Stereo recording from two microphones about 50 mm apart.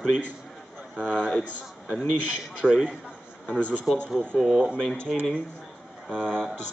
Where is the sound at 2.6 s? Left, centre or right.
Right.